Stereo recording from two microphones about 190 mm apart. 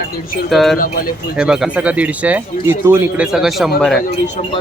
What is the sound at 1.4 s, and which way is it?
Speech, 5° right (ahead or behind).